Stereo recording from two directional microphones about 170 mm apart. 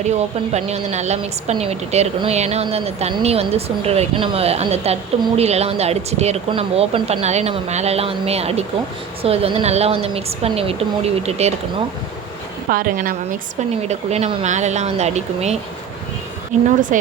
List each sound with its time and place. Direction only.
0.0 s a woman's voice: 40° right (ahead or behind)
12.7 s a woman's voice: 55° right (ahead or behind)
13.8 s a woman's voice: 40° right (ahead or behind)